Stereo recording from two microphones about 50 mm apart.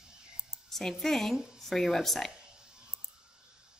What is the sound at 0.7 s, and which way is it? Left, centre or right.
Speech, centre.